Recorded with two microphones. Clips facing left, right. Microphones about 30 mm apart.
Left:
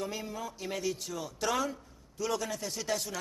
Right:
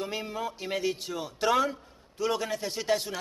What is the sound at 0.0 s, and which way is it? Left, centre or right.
A man's voice, right.